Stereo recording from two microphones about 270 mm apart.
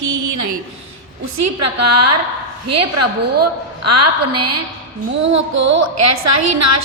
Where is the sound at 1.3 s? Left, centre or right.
Right.